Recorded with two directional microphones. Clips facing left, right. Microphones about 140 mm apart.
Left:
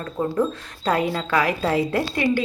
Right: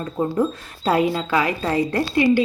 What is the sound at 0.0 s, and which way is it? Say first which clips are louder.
Speech: right 1 dB; 20° right (ahead or behind).